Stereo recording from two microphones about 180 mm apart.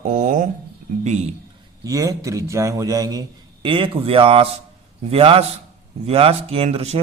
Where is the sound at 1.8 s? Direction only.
20° right (ahead or behind).